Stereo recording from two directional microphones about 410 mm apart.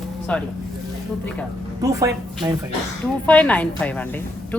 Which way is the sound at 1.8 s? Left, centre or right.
Centre.